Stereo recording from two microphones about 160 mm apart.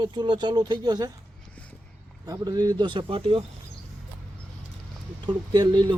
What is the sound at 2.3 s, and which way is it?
A man's voice, 25° right (ahead or behind).